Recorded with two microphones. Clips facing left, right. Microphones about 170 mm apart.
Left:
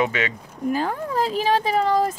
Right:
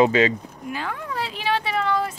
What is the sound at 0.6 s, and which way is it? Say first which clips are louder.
Speech: left 7 dB; 40° left (ahead or behind).